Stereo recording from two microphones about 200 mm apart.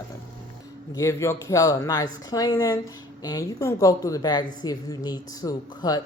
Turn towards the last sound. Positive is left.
turn(degrees=20)  # may be behind; listen again after turning